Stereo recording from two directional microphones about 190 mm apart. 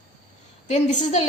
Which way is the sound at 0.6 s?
35° left (ahead or behind).